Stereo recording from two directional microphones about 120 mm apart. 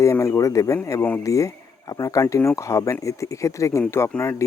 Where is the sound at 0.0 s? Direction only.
25° left (ahead or behind).